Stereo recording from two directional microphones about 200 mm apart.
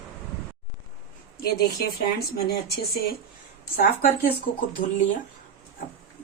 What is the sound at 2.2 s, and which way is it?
Speech, 50° left (ahead or behind).